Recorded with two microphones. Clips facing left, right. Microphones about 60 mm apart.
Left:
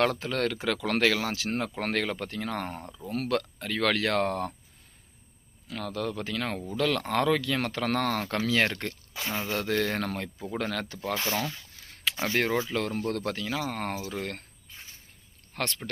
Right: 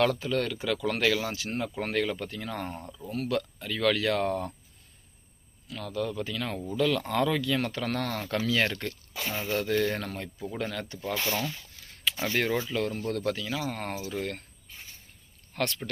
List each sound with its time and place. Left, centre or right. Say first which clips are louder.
0.0 s speech: even; left
1.5 s speech: left 2 dB; left
5.7 s speech: even; left
7.9 s speech: left 3 dB; left
10.3 s speech: left 2 dB; left
10.6 s speech: left 2 dB; left
12.1 s speech: left 1 dB; left
12.6 s speech: left 1 dB; left